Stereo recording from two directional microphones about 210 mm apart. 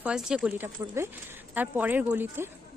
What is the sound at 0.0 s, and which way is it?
Speech, 5° right (ahead or behind).